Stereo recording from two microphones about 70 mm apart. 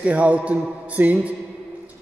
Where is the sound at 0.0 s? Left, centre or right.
Centre.